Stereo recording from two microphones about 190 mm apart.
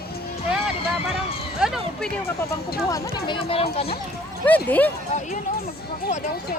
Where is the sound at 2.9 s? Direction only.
20° left (ahead or behind).